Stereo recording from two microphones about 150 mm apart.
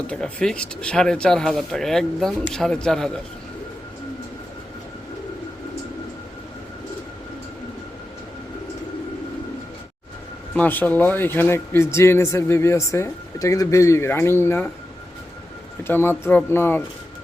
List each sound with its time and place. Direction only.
0.1 s speech: 5° left (ahead or behind)
10.5 s speech: 10° left (ahead or behind)
15.8 s speech: 15° left (ahead or behind)